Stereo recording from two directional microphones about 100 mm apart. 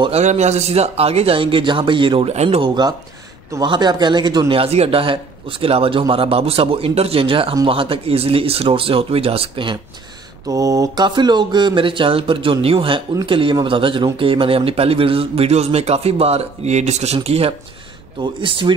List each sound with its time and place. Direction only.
0.1 s speech: 90° right; by 2.2 s 55° right (ahead or behind)
2.2 s speech: 85° right
2.6 s a man's voice: 45° right (ahead or behind)
4.5 s speech: 80° right; by 9.8 s 65° right (ahead or behind)
10.5 s speech: 35° right (ahead or behind); by 17.6 s 85° right
18.2 s speech: 55° right (ahead or behind)